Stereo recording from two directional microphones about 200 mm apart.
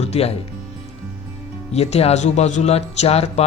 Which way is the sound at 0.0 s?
30° left (ahead or behind).